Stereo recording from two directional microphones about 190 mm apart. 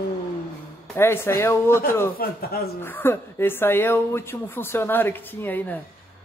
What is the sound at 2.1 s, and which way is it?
Speech, 55° left (ahead or behind).